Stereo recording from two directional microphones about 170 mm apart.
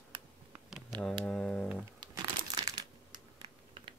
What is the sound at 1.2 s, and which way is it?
Speech, 5° left (ahead or behind).